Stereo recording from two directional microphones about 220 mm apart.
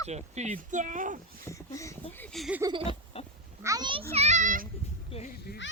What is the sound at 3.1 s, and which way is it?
Pig, 25° left (ahead or behind).